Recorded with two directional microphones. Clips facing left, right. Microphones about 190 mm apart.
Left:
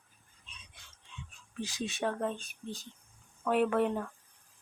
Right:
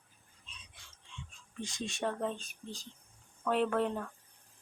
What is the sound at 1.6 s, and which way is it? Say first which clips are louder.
Speech: left 2 dB; 5° left (ahead or behind).